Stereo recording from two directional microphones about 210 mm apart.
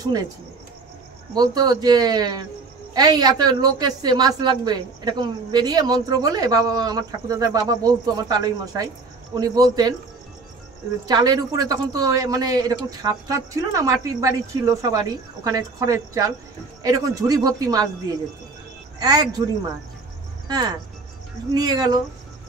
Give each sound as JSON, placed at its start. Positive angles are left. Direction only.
{"t": 0.0, "sound": "a woman's voice", "side_deg": -20}
{"t": 1.3, "sound": "a woman's voice", "side_deg": -20}
{"t": 11.1, "sound": "speech", "side_deg": -20}
{"t": 18.9, "sound": "a woman's voice", "side_deg": -20}
{"t": 20.4, "sound": "a woman's voice", "side_deg": -20}